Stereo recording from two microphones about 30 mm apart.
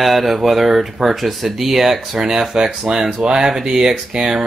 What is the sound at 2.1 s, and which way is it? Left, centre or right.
Speech, right.